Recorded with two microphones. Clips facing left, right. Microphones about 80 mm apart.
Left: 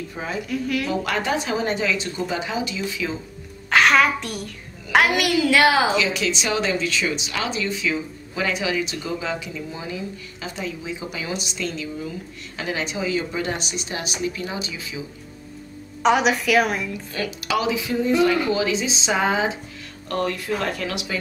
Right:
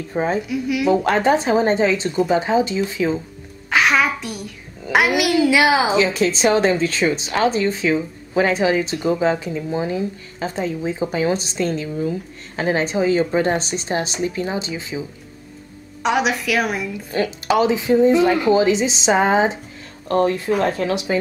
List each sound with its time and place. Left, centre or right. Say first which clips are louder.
0.1 s a woman's voice: right 12 dB; right
0.5 s a woman's voice: right 5 dB; centre
1.0 s a woman's voice: right 7 dB; right
3.7 s a woman's voice: even; centre
5.5 s a woman's voice: left 2 dB; centre
5.9 s a woman's voice: right 5 dB; right
16.0 s a woman's voice: left 1 dB; centre
17.1 s a woman's voice: right 7 dB; right